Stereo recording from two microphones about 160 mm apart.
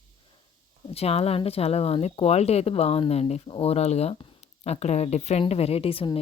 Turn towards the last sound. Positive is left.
turn(degrees=35)  # may be behind; listen again after turning